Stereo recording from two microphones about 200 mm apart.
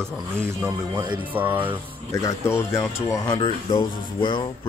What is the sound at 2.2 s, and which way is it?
Speech, 15° left (ahead or behind).